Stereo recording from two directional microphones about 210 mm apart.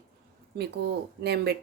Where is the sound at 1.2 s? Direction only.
50° right (ahead or behind).